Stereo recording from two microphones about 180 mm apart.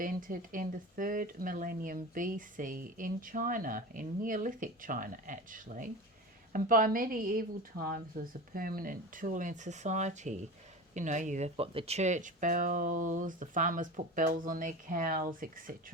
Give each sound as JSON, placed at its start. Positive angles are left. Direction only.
{"t": 0.0, "sound": "speech", "side_deg": -50}